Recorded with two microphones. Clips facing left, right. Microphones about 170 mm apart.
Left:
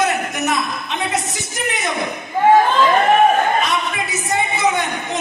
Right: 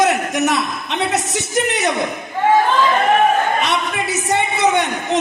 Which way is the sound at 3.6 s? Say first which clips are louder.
Right 2 dB; 70° right (ahead or behind).